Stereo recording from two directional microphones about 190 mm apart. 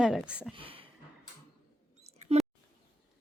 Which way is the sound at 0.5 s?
30° right (ahead or behind).